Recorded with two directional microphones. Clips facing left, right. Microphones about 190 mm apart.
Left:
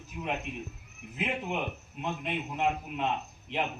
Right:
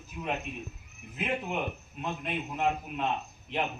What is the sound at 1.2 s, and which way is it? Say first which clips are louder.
A man's voice: right 1 dB; 15° left (ahead or behind).